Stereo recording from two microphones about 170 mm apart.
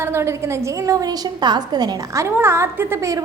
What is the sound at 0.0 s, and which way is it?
A woman's voice, 15° right (ahead or behind).